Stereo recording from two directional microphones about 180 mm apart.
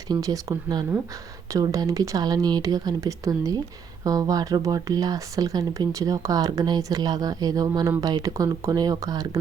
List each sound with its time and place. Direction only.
0.1 s speech: 20° right (ahead or behind)